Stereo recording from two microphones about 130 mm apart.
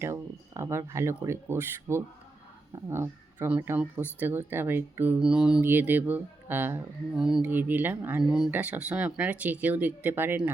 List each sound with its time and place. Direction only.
0.0 s speech: 20° right (ahead or behind)
7.2 s speech: 5° right (ahead or behind)
8.2 s speech: 5° right (ahead or behind)
8.4 s speech: 15° right (ahead or behind)